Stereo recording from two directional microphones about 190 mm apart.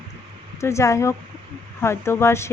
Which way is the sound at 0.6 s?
15° left (ahead or behind).